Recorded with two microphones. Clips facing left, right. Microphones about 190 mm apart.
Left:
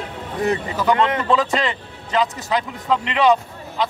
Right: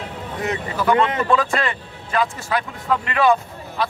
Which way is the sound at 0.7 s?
20° left (ahead or behind).